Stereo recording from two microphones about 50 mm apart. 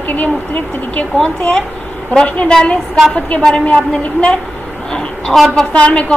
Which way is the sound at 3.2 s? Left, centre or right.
Left.